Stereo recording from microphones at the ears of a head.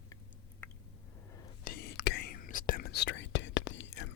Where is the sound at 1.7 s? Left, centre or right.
Left.